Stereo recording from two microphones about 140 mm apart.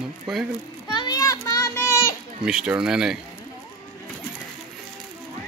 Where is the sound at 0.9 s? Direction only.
30° left (ahead or behind).